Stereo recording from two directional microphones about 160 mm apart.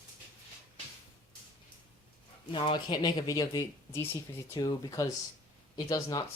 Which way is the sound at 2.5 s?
35° left (ahead or behind).